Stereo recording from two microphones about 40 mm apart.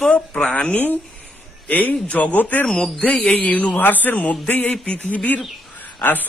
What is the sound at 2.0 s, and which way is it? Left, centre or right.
Speech, left.